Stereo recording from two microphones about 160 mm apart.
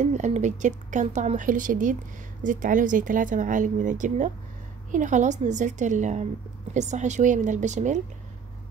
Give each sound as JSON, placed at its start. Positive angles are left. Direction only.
{"t": 0.0, "sound": "speech", "side_deg": -45}